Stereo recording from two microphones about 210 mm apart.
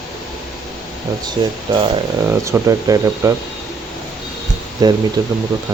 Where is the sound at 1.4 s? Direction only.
20° right (ahead or behind).